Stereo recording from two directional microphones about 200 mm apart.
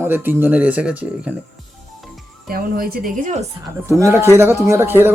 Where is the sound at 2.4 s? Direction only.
50° right (ahead or behind).